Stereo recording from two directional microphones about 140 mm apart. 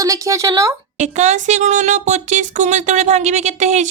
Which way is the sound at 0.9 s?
55° right (ahead or behind).